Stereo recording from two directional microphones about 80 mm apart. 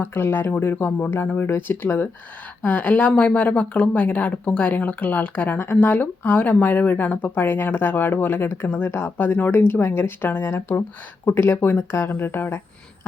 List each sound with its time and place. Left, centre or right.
0.0 s speech: left